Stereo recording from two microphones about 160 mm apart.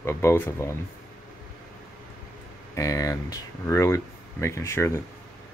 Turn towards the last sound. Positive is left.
turn(degrees=15)  # may be behind; listen again after turning